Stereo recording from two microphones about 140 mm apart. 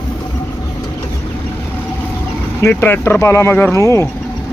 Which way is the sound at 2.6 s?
15° left (ahead or behind).